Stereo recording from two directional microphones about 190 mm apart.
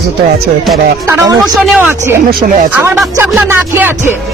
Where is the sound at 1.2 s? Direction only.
20° right (ahead or behind).